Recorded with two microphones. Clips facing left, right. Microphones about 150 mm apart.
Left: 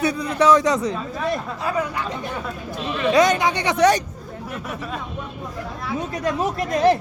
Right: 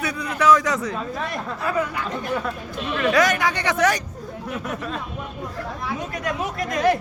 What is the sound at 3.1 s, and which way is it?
Speech, 25° left (ahead or behind).